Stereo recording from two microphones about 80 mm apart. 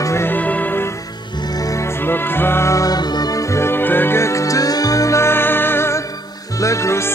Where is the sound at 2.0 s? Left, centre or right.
Left.